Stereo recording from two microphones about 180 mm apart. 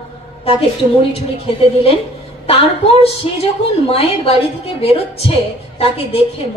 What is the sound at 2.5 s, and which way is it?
A woman's voice, 35° left (ahead or behind).